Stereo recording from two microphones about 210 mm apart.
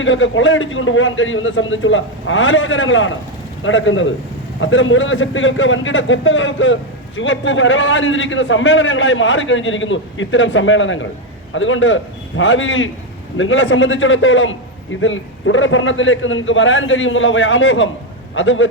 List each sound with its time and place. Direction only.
0.0 s a man's voice: 65° left (ahead or behind)